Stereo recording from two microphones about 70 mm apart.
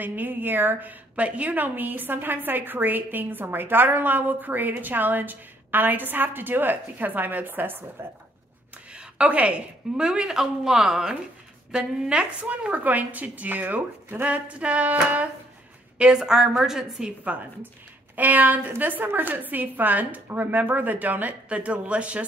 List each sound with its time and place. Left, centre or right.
0.0 s a woman's voice: right
16.2 s a woman's voice: centre
17.2 s a woman's voice: right